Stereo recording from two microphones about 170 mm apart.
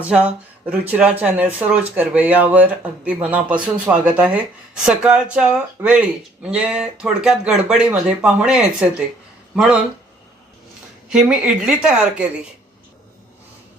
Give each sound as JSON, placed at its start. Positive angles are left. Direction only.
{"t": 0.0, "sound": "speech", "side_deg": -5}
{"t": 11.1, "sound": "a woman's voice", "side_deg": -5}